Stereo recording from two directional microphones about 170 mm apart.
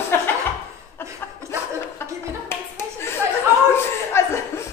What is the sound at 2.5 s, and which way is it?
Clapping, 15° left (ahead or behind).